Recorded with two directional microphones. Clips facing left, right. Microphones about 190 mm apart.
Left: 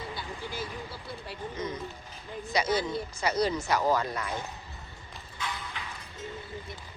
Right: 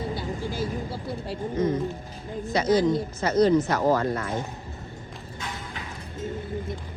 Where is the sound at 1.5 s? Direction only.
45° right (ahead or behind).